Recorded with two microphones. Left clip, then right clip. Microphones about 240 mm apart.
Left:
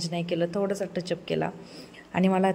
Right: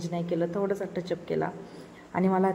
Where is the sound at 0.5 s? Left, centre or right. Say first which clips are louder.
Left 1 dB; left.